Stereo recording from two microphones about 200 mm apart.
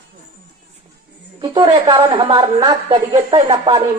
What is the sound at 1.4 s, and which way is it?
A woman's voice, 25° right (ahead or behind).